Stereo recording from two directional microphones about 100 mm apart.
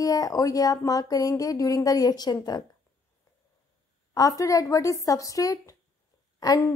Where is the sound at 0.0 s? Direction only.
35° left (ahead or behind).